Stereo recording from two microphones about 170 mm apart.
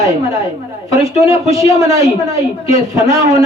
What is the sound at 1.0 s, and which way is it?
A man's voice, 20° right (ahead or behind).